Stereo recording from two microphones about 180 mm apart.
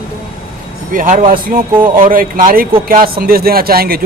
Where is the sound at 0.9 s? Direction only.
50° right (ahead or behind).